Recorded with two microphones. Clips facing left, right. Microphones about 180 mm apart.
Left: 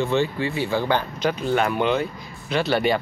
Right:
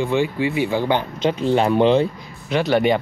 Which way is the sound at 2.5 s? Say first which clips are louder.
Right 3 dB; 15° right (ahead or behind).